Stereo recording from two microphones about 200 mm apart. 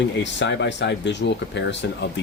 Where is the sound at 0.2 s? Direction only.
65° left (ahead or behind).